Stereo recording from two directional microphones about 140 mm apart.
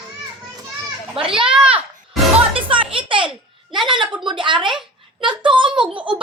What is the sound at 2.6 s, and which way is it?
Music, 40° right (ahead or behind).